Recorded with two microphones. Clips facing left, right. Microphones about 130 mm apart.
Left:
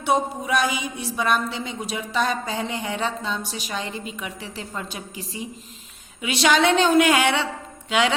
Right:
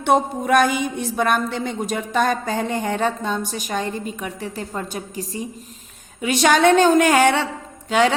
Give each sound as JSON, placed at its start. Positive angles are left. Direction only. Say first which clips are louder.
{"t": 0.0, "sound": "a woman's voice", "louder": "right 4 dB", "side_deg": -55}
{"t": 5.1, "sound": "a woman's voice", "louder": "right 5 dB", "side_deg": 15}
{"t": 6.2, "sound": "a woman's voice", "louder": "right 4 dB", "side_deg": -45}